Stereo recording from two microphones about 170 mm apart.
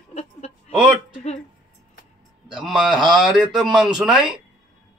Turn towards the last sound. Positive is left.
turn(degrees=-5)  # may be behind; listen again after turning